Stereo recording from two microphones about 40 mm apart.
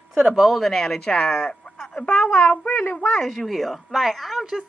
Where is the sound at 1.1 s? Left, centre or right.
Left.